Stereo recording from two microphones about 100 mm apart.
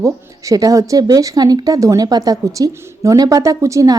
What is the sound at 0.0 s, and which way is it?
A woman's voice, 35° right (ahead or behind).